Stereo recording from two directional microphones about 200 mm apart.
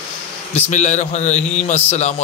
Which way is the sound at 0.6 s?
35° left (ahead or behind).